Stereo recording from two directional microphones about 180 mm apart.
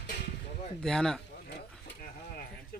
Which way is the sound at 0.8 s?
5° left (ahead or behind).